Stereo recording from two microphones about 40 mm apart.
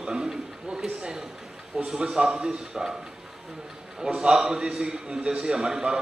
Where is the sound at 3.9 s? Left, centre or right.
Right.